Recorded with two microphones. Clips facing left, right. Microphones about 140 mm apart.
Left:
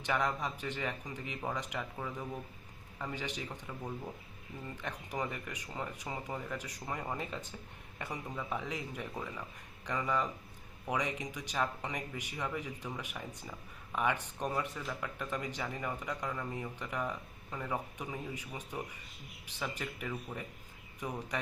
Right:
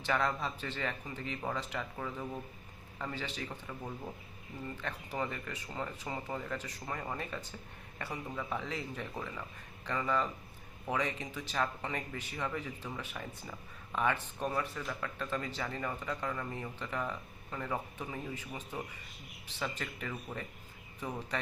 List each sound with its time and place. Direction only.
0.0 s speech: 15° left (ahead or behind)
4.8 s a man's voice: 15° left (ahead or behind)